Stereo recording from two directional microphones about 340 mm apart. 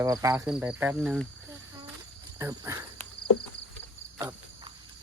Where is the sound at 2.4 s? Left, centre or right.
Centre.